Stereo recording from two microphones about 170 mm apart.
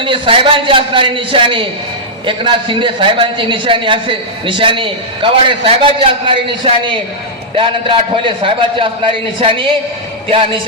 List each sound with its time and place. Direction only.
0.0 s a man's voice: 30° right (ahead or behind)